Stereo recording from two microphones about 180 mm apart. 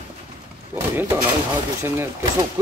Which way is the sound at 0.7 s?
15° right (ahead or behind).